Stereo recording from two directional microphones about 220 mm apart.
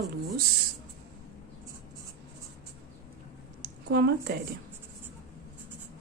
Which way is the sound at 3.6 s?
45° right (ahead or behind).